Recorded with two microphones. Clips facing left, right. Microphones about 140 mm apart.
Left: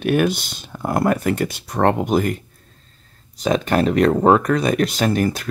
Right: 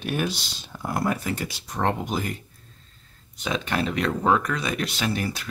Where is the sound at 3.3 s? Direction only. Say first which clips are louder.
Left 9 dB; 40° left (ahead or behind).